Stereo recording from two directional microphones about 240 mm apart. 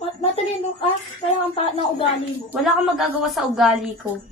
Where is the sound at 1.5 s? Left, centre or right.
Left.